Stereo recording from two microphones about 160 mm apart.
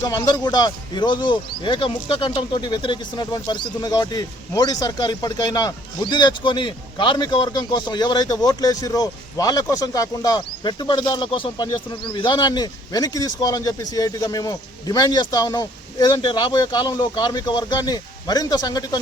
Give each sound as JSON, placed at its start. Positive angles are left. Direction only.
{"t": 0.0, "sound": "speech", "side_deg": 25}